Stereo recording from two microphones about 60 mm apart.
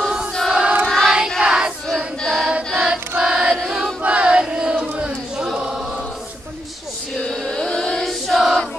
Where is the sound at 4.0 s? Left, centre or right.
Right.